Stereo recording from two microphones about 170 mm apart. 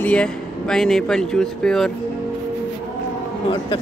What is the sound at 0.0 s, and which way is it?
Speech, 5° left (ahead or behind).